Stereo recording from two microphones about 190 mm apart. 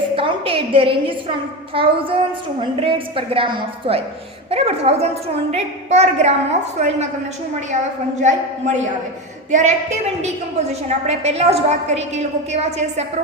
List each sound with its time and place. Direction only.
0.2 s a woman's voice: 30° right (ahead or behind)
8.2 s a woman's voice: 40° right (ahead or behind)